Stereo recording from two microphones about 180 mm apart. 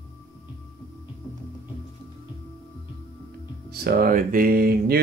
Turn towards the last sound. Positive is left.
turn(degrees=-55)  # may be behind; listen again after turning